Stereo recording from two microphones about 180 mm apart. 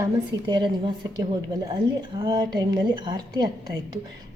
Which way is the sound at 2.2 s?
25° right (ahead or behind).